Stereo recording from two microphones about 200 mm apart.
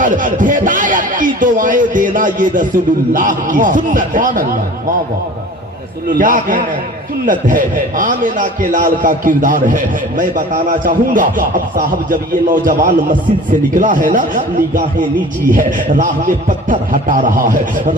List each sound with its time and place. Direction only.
0.0 s a man's voice: 40° right (ahead or behind)
6.1 s a man's voice: 40° right (ahead or behind)